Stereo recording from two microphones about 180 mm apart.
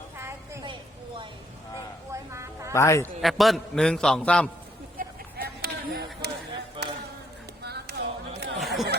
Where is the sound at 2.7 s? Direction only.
15° left (ahead or behind).